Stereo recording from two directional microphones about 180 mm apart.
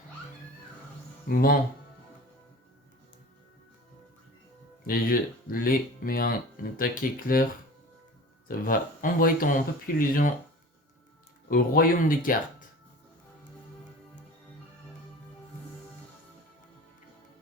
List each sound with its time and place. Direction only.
1.3 s speech: 55° left (ahead or behind)
4.9 s speech: 55° left (ahead or behind)
8.4 s speech: 50° left (ahead or behind)
11.4 s speech: 55° left (ahead or behind)